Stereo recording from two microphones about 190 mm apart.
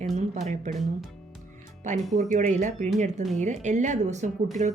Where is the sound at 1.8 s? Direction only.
40° right (ahead or behind).